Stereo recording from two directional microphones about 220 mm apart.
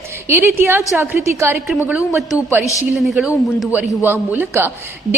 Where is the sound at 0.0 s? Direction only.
10° right (ahead or behind).